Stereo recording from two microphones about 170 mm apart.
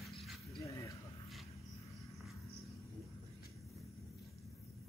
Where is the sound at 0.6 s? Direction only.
20° left (ahead or behind).